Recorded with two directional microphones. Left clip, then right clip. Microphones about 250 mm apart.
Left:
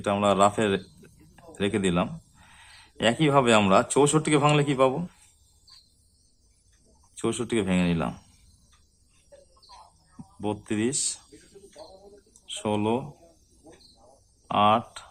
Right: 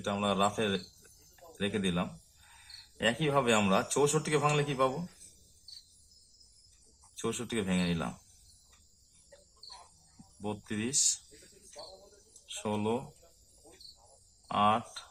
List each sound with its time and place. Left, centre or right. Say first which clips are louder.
0.0 s speech: left 9 dB; left
7.2 s speech: left 8 dB; centre
10.4 s speech: left 9 dB; left
12.5 s speech: left 7 dB; centre
14.4 s speech: left 7 dB; left